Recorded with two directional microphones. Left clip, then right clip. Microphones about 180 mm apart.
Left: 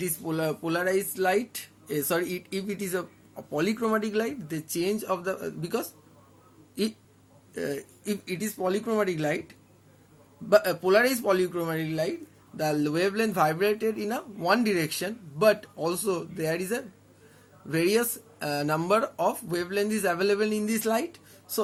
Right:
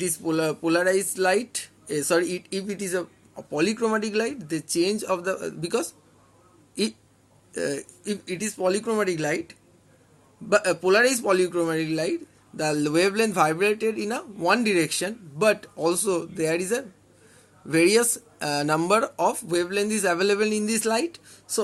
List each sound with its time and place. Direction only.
0.0 s speech: 25° right (ahead or behind)
7.5 s speech: 30° right (ahead or behind)
8.0 s speech: 15° right (ahead or behind)